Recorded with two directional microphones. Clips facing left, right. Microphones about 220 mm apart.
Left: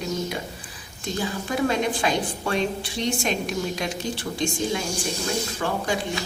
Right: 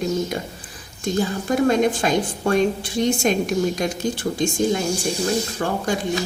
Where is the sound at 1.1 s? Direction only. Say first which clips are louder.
Right 6 dB; 45° right (ahead or behind).